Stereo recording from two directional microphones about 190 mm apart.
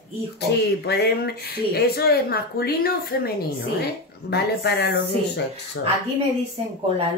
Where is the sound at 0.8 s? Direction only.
55° left (ahead or behind).